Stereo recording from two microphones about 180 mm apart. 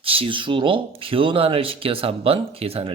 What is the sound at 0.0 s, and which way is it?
Speech, 30° right (ahead or behind).